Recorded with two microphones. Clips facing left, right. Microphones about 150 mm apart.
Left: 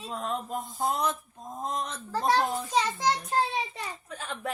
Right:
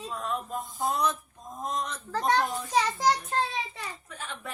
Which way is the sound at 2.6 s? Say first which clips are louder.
Right 1 dB; 10° right (ahead or behind).